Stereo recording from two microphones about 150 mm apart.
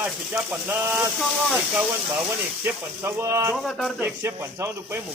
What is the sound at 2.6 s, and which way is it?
Speech, 20° right (ahead or behind).